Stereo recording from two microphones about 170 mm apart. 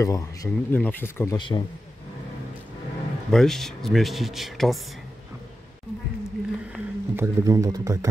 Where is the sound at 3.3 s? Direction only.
Centre (ahead or behind).